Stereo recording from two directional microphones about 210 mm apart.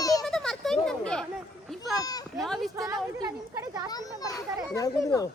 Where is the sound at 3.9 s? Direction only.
15° left (ahead or behind).